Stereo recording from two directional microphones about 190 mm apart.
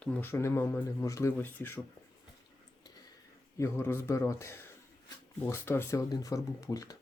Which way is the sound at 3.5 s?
15° left (ahead or behind).